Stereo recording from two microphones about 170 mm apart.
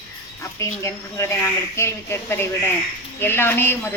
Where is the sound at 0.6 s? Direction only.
15° left (ahead or behind).